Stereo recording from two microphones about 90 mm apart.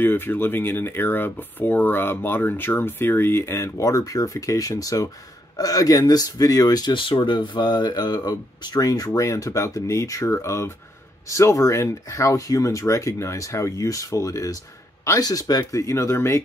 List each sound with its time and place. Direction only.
0.0 s speech: 25° left (ahead or behind); by 6.9 s 45° left (ahead or behind)
6.9 s speech: 70° left (ahead or behind); by 16.4 s 30° left (ahead or behind)